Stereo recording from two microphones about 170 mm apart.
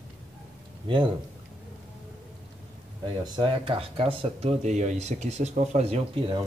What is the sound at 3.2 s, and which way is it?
Speech, 30° right (ahead or behind).